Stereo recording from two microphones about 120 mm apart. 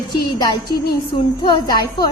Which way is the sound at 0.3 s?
40° left (ahead or behind).